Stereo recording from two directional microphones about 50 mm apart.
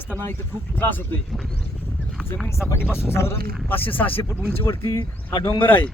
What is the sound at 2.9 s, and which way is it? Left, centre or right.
Speech, left.